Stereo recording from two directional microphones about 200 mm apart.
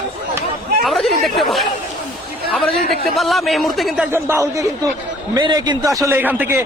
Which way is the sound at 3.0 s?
Centre (ahead or behind).